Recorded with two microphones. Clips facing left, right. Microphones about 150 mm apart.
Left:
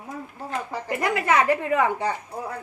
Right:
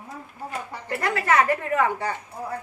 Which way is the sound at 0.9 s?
20° left (ahead or behind).